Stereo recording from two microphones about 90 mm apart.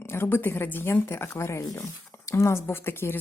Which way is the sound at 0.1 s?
25° left (ahead or behind).